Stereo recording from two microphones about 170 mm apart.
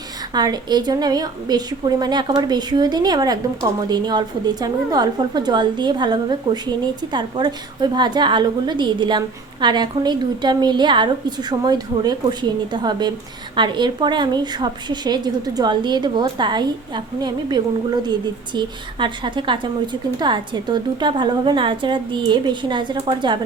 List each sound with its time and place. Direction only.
0.3 s a woman's voice: 25° right (ahead or behind)